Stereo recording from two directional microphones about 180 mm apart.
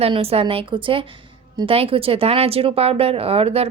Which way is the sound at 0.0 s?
35° right (ahead or behind).